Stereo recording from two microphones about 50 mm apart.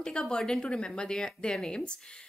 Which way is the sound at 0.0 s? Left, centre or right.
Centre.